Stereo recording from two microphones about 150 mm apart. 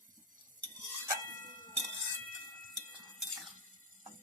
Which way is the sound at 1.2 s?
60° right (ahead or behind).